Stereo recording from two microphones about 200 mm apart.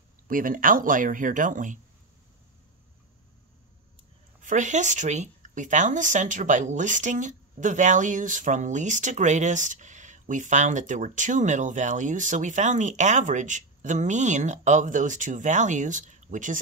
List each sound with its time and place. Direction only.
0.3 s speech: 45° right (ahead or behind)
4.4 s speech: 40° right (ahead or behind)